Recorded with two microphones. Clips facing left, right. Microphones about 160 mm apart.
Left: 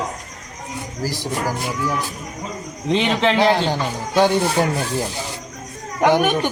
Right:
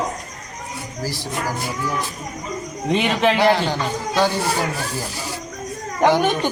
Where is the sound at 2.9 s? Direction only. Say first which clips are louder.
Even; 15° right (ahead or behind).